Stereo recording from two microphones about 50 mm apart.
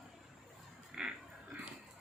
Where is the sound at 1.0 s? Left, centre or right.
Centre.